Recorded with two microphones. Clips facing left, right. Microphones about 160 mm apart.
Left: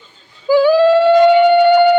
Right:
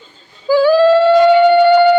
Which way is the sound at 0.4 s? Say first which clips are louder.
Even; 15° left (ahead or behind).